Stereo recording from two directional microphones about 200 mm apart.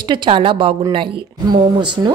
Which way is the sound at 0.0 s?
25° right (ahead or behind).